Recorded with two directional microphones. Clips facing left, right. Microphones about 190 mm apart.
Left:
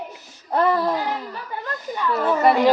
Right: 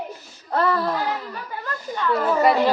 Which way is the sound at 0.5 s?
15° left (ahead or behind).